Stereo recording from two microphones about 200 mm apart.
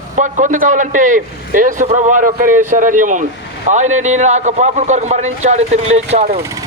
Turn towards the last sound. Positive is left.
turn(degrees=-35)  # may be behind; listen again after turning